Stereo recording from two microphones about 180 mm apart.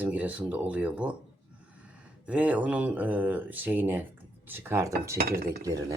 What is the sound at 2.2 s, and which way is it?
Speech, 10° right (ahead or behind).